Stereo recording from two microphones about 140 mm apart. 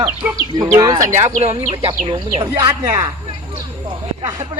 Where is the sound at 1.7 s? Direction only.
45° right (ahead or behind).